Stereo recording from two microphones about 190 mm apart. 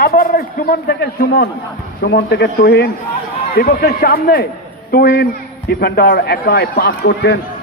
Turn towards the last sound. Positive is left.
turn(degrees=60)  # may be behind; listen again after turning